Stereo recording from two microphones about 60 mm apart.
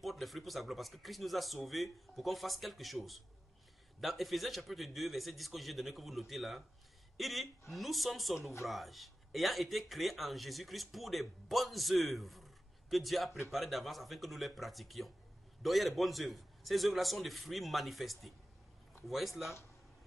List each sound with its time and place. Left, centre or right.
0.0 s speech: centre